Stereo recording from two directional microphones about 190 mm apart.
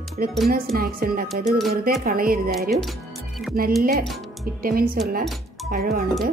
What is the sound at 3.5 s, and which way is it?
Speech, 50° right (ahead or behind).